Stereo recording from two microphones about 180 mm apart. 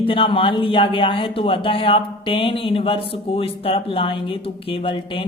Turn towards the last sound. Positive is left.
turn(degrees=30)  # may be behind; listen again after turning